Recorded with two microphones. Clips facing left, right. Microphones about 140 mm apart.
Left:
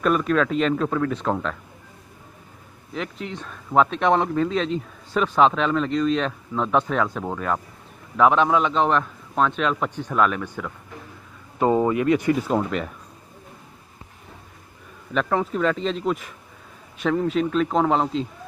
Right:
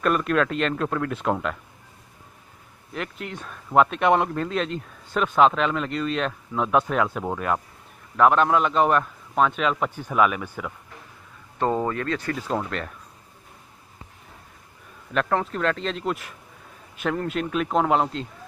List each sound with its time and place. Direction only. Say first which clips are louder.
0.0 s speech: left 2 dB; centre (ahead or behind)
2.9 s speech: left 2 dB; 5° right (ahead or behind)
11.5 s speech: left 5 dB; 10° left (ahead or behind)
15.1 s speech: left 1 dB; centre (ahead or behind)